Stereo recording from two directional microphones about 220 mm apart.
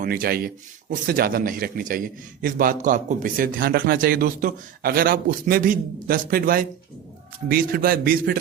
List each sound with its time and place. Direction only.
0.0 s speech: 40° right (ahead or behind)